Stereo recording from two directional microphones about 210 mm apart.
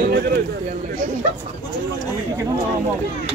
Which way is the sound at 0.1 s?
50° right (ahead or behind).